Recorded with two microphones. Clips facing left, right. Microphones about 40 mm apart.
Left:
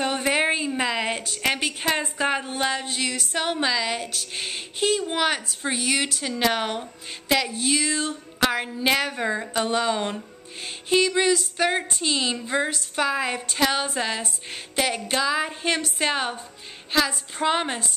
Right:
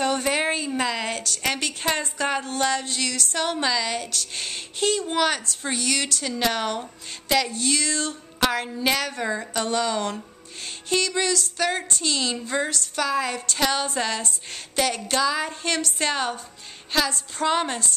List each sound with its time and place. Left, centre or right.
0.0 s a woman's voice: centre